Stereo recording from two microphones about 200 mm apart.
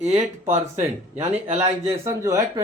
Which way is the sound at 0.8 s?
35° right (ahead or behind).